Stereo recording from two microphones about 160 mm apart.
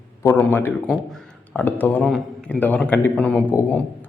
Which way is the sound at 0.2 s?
15° left (ahead or behind).